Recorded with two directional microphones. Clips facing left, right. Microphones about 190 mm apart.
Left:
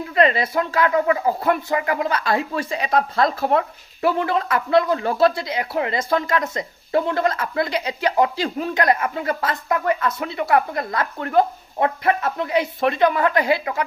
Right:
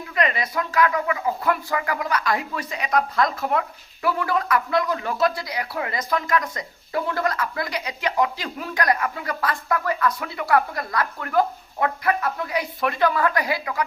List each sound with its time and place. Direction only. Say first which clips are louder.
0.1 s speech: left 6 dB; 30° left (ahead or behind)
1.5 s speech: left 3 dB; 25° left (ahead or behind)